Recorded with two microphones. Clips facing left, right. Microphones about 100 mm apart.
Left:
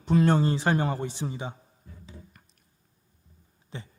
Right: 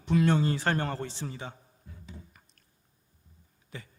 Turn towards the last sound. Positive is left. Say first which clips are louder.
# left 3 dB
turn(degrees=30)  # may be behind; listen again after turning